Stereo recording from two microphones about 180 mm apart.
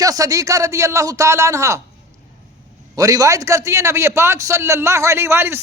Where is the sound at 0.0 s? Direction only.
20° right (ahead or behind).